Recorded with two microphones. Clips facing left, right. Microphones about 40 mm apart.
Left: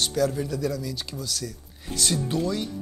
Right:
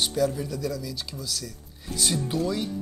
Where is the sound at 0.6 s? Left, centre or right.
Centre.